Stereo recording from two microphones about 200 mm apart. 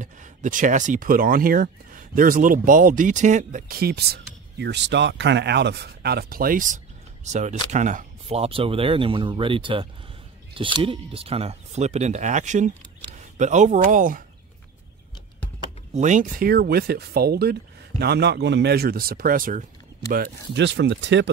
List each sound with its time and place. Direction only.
0.0 s speech: 40° right (ahead or behind)
15.9 s speech: 35° right (ahead or behind)
20.1 s speech: 55° right (ahead or behind)